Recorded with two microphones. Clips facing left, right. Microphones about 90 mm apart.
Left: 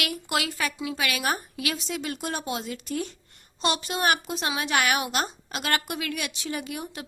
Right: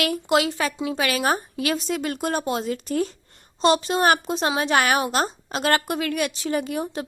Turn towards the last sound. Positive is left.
turn(degrees=-35)  # may be behind; listen again after turning